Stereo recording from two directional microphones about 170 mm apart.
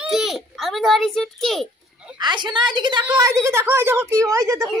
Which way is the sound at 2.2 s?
25° right (ahead or behind).